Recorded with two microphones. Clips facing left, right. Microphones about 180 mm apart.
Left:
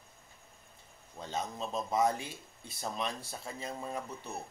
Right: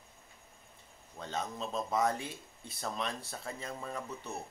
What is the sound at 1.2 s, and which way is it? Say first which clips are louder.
A man's voice: left 1 dB; 20° left (ahead or behind).